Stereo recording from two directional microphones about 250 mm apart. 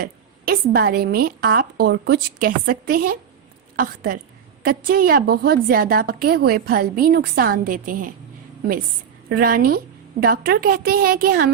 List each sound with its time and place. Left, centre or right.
0.0 s a woman's voice: right
9.3 s a woman's voice: right